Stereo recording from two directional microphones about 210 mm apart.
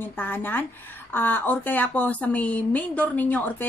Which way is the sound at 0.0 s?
10° left (ahead or behind).